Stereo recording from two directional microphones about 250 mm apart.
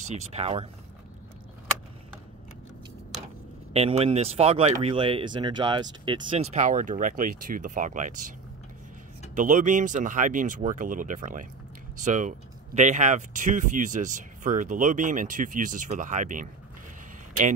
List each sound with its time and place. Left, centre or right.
0.1 s speech: right
3.7 s speech: right
9.3 s speech: right